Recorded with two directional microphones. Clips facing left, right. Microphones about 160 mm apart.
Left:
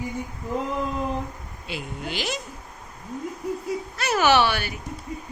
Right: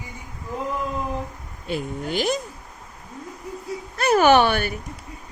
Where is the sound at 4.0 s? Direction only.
50° right (ahead or behind).